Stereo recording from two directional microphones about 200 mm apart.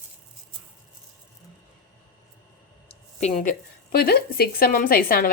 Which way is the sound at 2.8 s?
35° left (ahead or behind).